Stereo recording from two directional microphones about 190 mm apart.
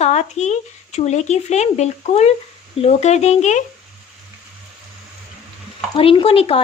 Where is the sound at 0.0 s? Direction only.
35° left (ahead or behind).